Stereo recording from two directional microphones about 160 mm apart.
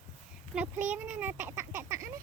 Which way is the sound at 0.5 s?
10° right (ahead or behind).